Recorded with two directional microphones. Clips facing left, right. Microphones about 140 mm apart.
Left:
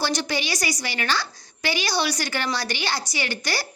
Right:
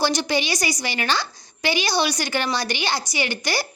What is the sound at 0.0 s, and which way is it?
A woman's voice, 15° right (ahead or behind).